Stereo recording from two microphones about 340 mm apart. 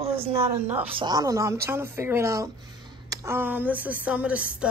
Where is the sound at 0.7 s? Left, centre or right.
Centre.